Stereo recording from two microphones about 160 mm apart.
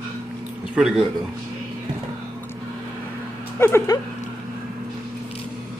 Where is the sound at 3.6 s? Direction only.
15° left (ahead or behind).